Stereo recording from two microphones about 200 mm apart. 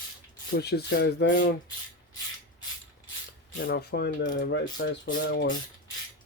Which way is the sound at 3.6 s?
55° left (ahead or behind).